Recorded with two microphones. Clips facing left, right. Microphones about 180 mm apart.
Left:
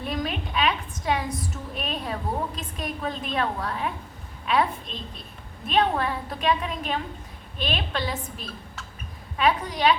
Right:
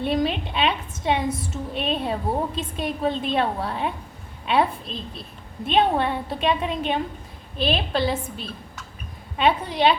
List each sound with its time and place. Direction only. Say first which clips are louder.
0.0 s a woman's voice: right 6 dB; 30° right (ahead or behind)